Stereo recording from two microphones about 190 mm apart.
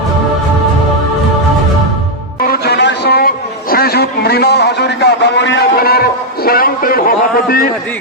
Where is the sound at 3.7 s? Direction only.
55° left (ahead or behind).